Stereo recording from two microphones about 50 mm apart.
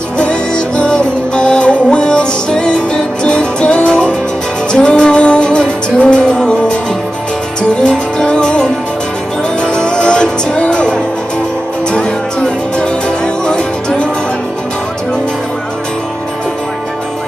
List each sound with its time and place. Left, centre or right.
0.2 s music: centre